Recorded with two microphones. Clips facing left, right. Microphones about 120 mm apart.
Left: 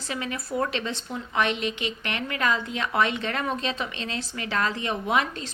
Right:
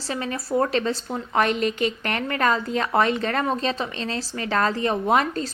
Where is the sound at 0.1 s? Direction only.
35° right (ahead or behind).